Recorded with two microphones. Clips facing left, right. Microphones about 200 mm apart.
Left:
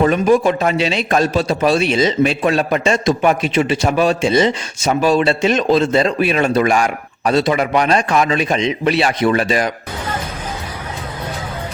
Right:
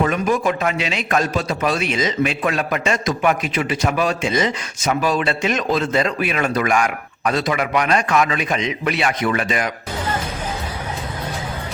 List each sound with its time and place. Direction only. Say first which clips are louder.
0.0 s a man's voice: left 6 dB; 30° left (ahead or behind)